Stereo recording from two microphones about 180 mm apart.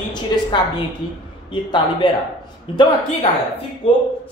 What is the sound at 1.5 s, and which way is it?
Speech, 25° left (ahead or behind).